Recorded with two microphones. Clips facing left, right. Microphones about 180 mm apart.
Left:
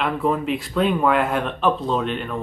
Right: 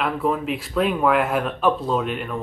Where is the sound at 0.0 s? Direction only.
Centre (ahead or behind).